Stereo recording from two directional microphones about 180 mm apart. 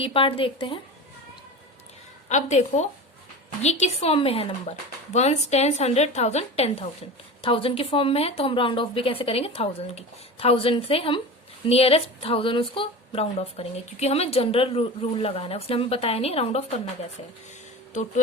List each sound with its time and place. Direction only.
0.0 s a woman's voice: 30° left (ahead or behind)
2.3 s speech: 40° left (ahead or behind)